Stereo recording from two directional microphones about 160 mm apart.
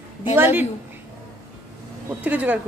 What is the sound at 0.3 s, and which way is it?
Speech, 15° right (ahead or behind).